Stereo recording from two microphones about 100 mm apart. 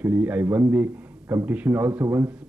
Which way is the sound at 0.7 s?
15° right (ahead or behind).